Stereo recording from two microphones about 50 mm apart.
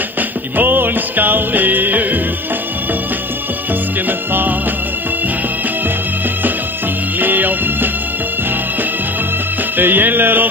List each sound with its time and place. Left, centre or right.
0.6 s music: right
4.3 s music: right
7.2 s music: right
9.8 s music: right